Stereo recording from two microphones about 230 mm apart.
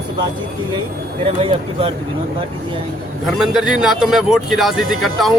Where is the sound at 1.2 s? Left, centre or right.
Right.